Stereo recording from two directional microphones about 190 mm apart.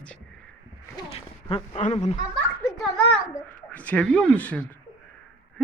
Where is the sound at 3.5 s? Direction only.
10° left (ahead or behind).